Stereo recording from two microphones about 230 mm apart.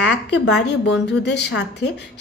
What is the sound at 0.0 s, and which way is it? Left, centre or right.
A woman's voice, left.